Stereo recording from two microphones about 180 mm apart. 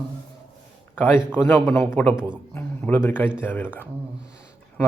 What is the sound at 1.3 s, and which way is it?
A man's voice, 10° left (ahead or behind).